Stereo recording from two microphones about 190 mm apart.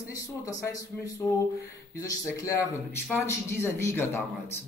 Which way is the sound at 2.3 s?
15° left (ahead or behind).